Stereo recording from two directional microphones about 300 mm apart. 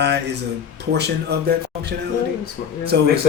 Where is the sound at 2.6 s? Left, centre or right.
Left.